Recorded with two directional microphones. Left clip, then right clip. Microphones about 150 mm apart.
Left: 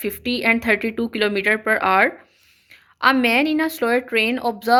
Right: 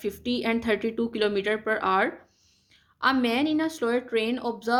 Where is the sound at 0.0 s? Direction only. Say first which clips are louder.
Left 7 dB; 20° left (ahead or behind).